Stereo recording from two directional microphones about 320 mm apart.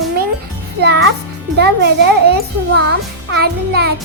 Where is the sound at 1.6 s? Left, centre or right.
Right.